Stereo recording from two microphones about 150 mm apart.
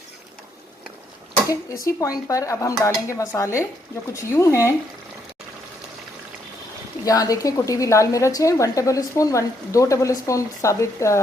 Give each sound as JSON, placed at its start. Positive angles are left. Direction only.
{"t": 1.5, "sound": "a woman's voice", "side_deg": 20}
{"t": 7.0, "sound": "a woman's voice", "side_deg": 25}